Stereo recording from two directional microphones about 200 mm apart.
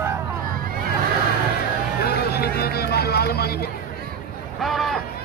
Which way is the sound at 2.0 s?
50° left (ahead or behind).